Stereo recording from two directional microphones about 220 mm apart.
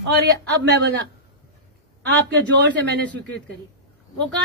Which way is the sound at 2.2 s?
50° right (ahead or behind).